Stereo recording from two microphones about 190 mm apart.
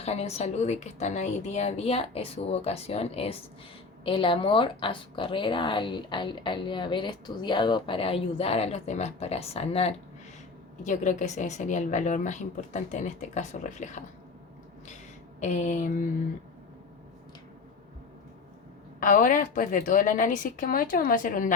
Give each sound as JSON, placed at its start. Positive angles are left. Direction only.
{"t": 0.0, "sound": "a woman's voice", "side_deg": 35}
{"t": 15.4, "sound": "speech", "side_deg": 40}
{"t": 18.9, "sound": "a woman's voice", "side_deg": 45}